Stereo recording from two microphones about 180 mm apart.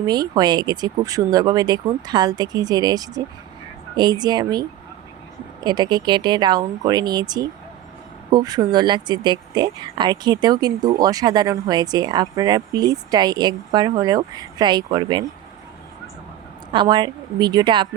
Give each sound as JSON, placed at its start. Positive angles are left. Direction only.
{"t": 0.0, "sound": "speech", "side_deg": -20}
{"t": 5.6, "sound": "speech", "side_deg": -25}
{"t": 16.7, "sound": "speech", "side_deg": -25}